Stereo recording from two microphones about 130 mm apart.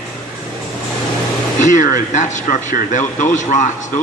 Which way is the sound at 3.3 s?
70° left (ahead or behind).